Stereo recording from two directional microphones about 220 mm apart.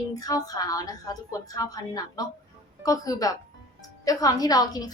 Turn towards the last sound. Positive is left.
turn(degrees=15)  # may be behind; listen again after turning